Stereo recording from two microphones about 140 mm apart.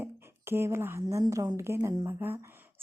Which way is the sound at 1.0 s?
25° right (ahead or behind).